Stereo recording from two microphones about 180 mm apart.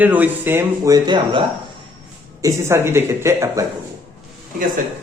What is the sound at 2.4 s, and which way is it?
Speech, 15° right (ahead or behind).